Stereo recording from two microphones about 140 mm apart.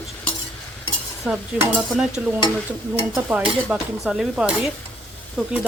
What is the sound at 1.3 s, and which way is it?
Dishes, 5° right (ahead or behind).